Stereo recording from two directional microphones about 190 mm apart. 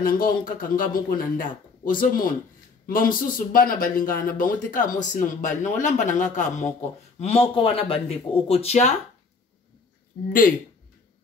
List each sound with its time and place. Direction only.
0.0 s speech: 50° left (ahead or behind)